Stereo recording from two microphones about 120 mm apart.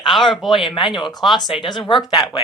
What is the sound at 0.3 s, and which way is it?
Speech, 40° left (ahead or behind).